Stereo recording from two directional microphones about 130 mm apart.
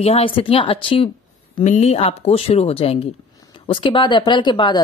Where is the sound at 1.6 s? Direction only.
65° left (ahead or behind).